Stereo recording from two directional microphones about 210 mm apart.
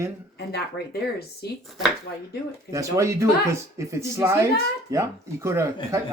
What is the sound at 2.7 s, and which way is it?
Speech, 15° right (ahead or behind).